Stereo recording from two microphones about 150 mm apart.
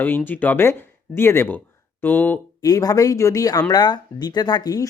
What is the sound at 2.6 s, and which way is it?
Speech, 25° left (ahead or behind).